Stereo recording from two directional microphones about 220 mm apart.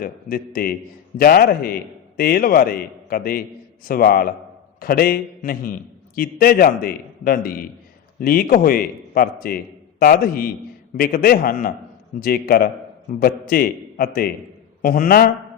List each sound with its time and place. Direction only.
0.0 s a man's voice: 40° left (ahead or behind)